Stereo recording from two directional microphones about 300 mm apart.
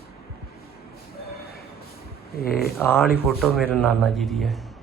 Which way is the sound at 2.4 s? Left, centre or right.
Left.